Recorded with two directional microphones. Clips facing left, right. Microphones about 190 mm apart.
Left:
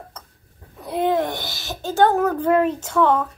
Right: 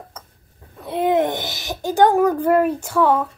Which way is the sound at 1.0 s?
20° right (ahead or behind).